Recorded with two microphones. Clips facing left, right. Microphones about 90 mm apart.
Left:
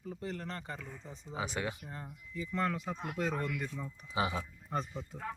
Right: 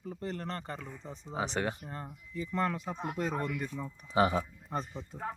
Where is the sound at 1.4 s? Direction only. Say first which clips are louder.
Right 4 dB; 60° right (ahead or behind).